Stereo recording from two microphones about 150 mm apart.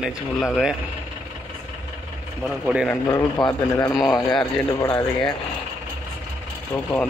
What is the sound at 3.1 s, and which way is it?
Speech, 25° left (ahead or behind).